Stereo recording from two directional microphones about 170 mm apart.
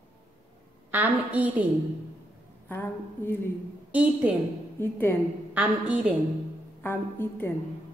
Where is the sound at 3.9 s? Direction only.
10° right (ahead or behind).